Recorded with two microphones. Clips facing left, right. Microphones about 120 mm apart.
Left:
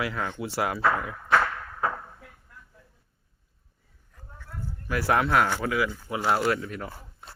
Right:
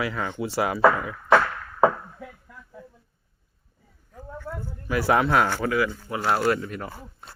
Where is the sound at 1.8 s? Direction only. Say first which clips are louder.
Right 10 dB; 90° right.